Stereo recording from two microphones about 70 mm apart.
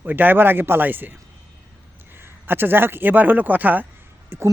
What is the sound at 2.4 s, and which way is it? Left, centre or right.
A man's voice, right.